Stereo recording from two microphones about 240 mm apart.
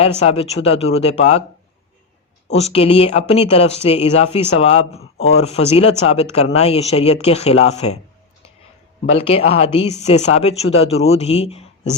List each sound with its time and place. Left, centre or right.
0.0 s speech: left
2.5 s speech: left
9.1 s speech: left